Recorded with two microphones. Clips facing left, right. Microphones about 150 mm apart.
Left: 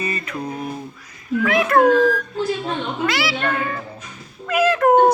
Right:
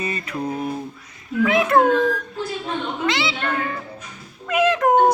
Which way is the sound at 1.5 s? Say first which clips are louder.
Left 1 dB; 20° right (ahead or behind).